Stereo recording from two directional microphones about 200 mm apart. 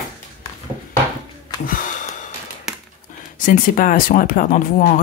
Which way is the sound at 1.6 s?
40° left (ahead or behind).